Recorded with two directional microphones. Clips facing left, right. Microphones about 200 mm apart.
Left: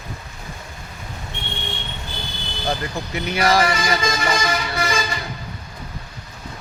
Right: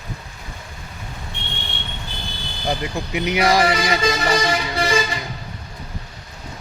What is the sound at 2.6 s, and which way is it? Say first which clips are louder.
Speech: right 1 dB; 15° right (ahead or behind).